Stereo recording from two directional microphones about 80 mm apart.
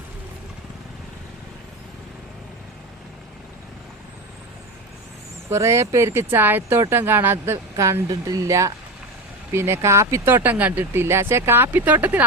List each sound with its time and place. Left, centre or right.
5.5 s speech: right